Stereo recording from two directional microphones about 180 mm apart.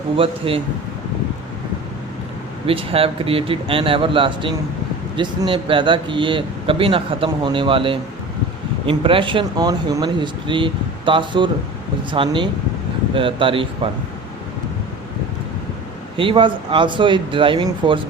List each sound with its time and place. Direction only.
0.2 s a man's voice: 30° right (ahead or behind)
2.6 s speech: 30° right (ahead or behind)
16.1 s speech: 30° right (ahead or behind)